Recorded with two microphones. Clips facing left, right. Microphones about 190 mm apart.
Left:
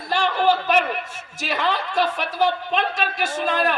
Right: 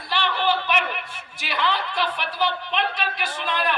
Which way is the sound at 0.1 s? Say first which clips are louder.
Left 4 dB; 45° left (ahead or behind).